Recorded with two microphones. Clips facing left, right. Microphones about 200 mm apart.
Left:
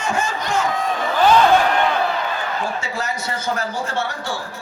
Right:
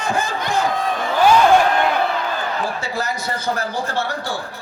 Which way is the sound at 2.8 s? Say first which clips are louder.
Right 2 dB; 35° right (ahead or behind).